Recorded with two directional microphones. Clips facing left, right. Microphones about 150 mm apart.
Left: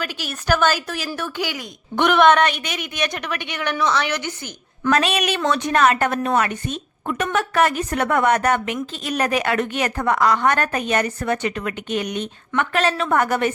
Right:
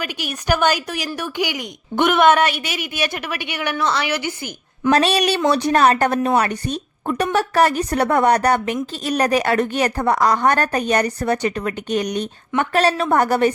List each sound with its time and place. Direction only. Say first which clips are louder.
0.0 s a woman's voice: right 2 dB; 15° right (ahead or behind)
2.0 s a woman's voice: even; centre (ahead or behind)
4.9 s a woman's voice: right 3 dB; 35° right (ahead or behind)